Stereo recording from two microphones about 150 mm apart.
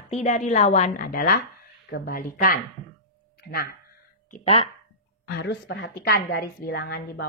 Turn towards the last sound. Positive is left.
turn(degrees=90)